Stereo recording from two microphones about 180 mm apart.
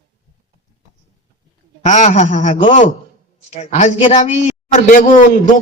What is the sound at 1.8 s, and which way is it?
A woman's voice, 40° left (ahead or behind).